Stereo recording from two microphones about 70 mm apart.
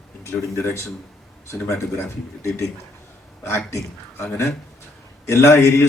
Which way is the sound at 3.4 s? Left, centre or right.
Left.